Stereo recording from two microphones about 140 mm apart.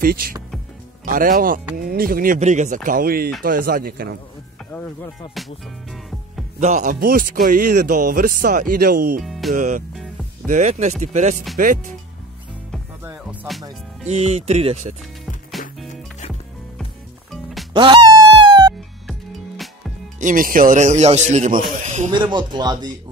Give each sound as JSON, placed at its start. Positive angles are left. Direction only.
{"t": 0.0, "sound": "speech", "side_deg": -90}
{"t": 6.6, "sound": "speech", "side_deg": -65}
{"t": 9.2, "sound": "music", "side_deg": 0}
{"t": 9.5, "sound": "speech", "side_deg": -65}
{"t": 11.5, "sound": "speech", "side_deg": -70}
{"t": 13.0, "sound": "music", "side_deg": -15}
{"t": 14.0, "sound": "speech", "side_deg": -50}
{"t": 15.9, "sound": "music", "side_deg": 55}
{"t": 17.7, "sound": "music", "side_deg": -35}
{"t": 19.0, "sound": "music", "side_deg": 0}
{"t": 20.2, "sound": "speech", "side_deg": -75}
{"t": 22.1, "sound": "speech", "side_deg": -35}